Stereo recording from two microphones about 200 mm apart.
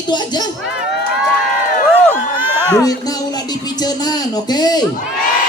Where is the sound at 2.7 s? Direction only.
20° left (ahead or behind).